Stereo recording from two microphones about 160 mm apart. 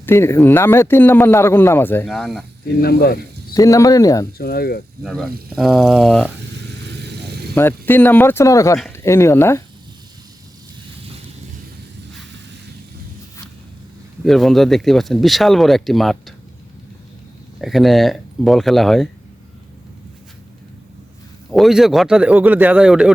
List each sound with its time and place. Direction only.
0.0 s speech: 15° left (ahead or behind)
2.0 s speech: centre (ahead or behind)
2.8 s speech: 80° left
3.5 s speech: 20° left (ahead or behind)
4.4 s speech: 70° left (ahead or behind)
5.0 s speech: 5° left (ahead or behind)
6.8 s vehicle: 90° right
7.5 s speech: 15° left (ahead or behind)
14.3 s speech: centre (ahead or behind)
17.6 s speech: centre (ahead or behind)
21.5 s speech: centre (ahead or behind)